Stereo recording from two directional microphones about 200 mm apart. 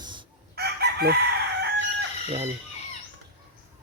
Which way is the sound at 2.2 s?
30° right (ahead or behind).